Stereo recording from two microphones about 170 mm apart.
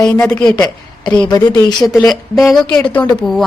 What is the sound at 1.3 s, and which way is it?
Speech, 20° left (ahead or behind).